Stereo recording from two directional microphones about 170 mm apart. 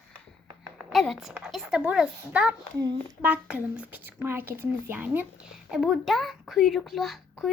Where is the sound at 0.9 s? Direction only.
Centre (ahead or behind).